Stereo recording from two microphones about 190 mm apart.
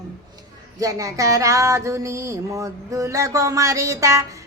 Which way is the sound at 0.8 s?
20° right (ahead or behind).